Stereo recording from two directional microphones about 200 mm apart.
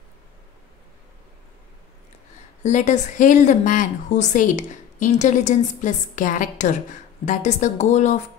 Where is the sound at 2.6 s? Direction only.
35° left (ahead or behind).